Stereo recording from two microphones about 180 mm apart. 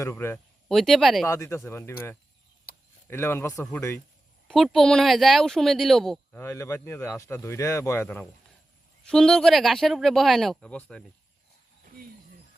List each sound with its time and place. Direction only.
0.0 s speech: 15° left (ahead or behind)
0.7 s speech: centre (ahead or behind)
1.3 s speech: 15° left (ahead or behind)
2.7 s a sound: 55° left (ahead or behind)
3.1 s speech: 15° left (ahead or behind)
4.4 s speech: centre (ahead or behind)
6.4 s speech: 15° left (ahead or behind)